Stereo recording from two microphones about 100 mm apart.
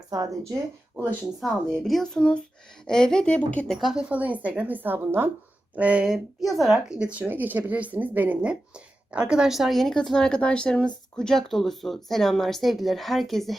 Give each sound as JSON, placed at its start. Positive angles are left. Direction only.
{"t": 1.2, "sound": "a woman's voice", "side_deg": -5}
{"t": 3.8, "sound": "speech", "side_deg": 0}
{"t": 4.1, "sound": "speech", "side_deg": -15}
{"t": 6.4, "sound": "speech", "side_deg": 0}